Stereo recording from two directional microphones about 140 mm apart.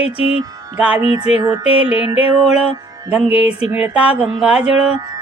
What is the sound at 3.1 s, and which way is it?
Speech, 10° right (ahead or behind).